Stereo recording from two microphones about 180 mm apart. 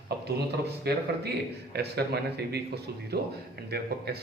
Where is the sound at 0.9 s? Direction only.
65° right (ahead or behind).